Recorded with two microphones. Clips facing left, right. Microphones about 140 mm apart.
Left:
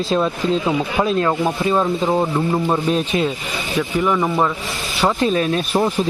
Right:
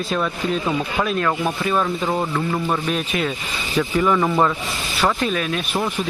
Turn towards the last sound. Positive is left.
turn(degrees=35)  # may be behind; listen again after turning